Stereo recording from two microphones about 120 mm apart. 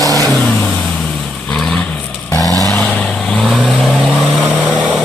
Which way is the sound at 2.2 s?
30° left (ahead or behind).